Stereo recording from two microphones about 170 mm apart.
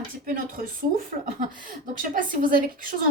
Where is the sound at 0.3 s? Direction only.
55° right (ahead or behind).